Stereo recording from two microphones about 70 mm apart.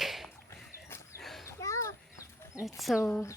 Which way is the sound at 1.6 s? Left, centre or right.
Left.